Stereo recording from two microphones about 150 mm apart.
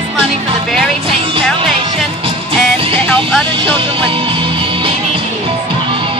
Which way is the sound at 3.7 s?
35° right (ahead or behind).